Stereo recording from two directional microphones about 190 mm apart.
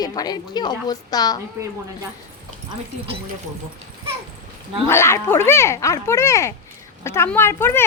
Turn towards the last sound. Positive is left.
turn(degrees=10)  # may be behind; listen again after turning